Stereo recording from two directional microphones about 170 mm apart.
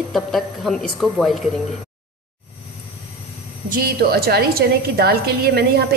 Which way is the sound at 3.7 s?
60° right (ahead or behind).